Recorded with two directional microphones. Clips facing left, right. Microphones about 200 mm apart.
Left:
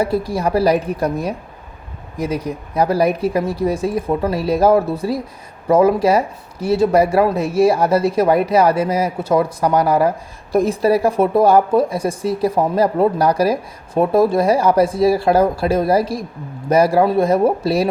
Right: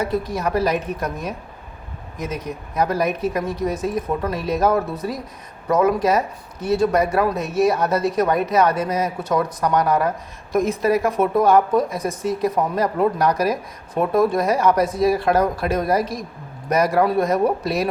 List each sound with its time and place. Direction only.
0.0 s a woman's voice: 30° left (ahead or behind)